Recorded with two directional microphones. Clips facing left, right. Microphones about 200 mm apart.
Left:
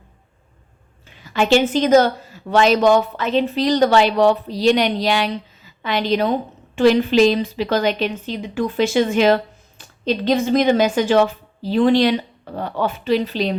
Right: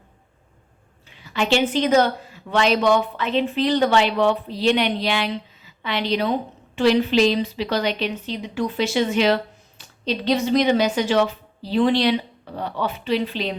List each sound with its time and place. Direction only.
1.2 s a woman's voice: 45° left (ahead or behind)